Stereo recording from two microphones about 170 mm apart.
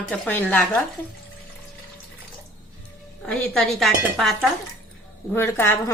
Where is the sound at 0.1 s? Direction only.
10° left (ahead or behind).